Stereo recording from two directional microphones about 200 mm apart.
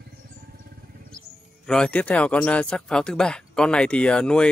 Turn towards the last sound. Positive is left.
turn(degrees=5)  # may be behind; listen again after turning